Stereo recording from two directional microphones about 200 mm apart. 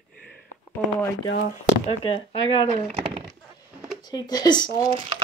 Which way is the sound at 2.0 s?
30° left (ahead or behind).